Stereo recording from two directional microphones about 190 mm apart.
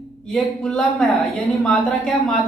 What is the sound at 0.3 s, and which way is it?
A woman's voice, 5° left (ahead or behind).